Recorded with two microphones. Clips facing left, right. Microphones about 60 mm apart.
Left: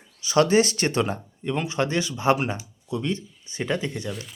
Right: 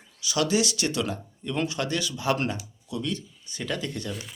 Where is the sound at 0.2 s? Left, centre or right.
Left.